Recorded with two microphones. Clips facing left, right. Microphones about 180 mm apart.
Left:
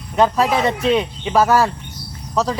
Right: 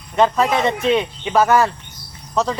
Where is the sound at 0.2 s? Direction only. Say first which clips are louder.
Even; 5° left (ahead or behind).